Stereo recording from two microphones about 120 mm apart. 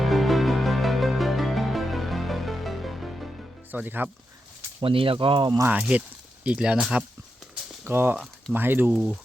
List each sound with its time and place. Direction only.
0.0 s music: centre (ahead or behind)
3.7 s speech: 15° right (ahead or behind)
4.8 s speech: 45° right (ahead or behind)
5.6 s speech: 10° right (ahead or behind)
7.9 s speech: 20° right (ahead or behind)